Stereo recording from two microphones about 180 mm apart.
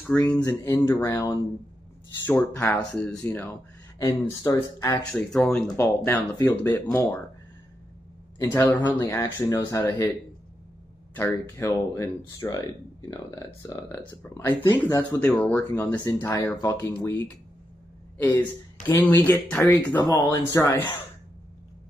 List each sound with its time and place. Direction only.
0.0 s speech: 10° left (ahead or behind)
5.1 s speech: 5° left (ahead or behind)
5.8 s speech: 15° left (ahead or behind)
8.4 s speech: 15° left (ahead or behind)
11.1 s speech: 10° left (ahead or behind)
13.7 s speech: 15° left (ahead or behind)
18.1 s a sound: 10° left (ahead or behind)
18.9 s speech: 10° left (ahead or behind)